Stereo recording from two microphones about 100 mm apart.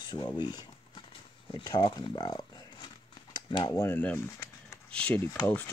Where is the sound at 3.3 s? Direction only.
55° left (ahead or behind).